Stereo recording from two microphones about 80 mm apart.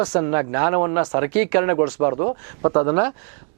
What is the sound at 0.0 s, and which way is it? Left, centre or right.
Speech, centre.